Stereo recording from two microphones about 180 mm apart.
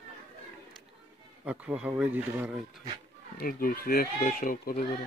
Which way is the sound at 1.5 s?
5° right (ahead or behind).